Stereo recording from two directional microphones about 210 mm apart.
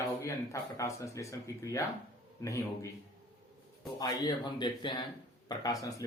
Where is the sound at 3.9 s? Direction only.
20° left (ahead or behind).